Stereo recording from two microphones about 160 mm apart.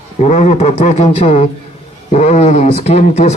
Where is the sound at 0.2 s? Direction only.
45° left (ahead or behind).